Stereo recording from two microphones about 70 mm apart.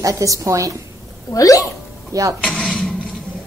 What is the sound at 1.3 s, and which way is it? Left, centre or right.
Speech, left.